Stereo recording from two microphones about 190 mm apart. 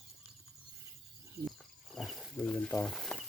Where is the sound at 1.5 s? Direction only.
Centre (ahead or behind).